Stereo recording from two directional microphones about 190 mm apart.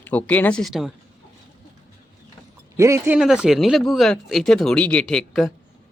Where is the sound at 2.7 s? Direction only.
15° right (ahead or behind).